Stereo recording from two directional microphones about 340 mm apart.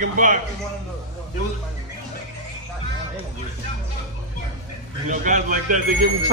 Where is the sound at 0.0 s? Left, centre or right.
Right.